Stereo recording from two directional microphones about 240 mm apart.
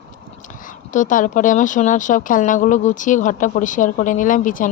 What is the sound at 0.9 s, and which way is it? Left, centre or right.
Speech, left.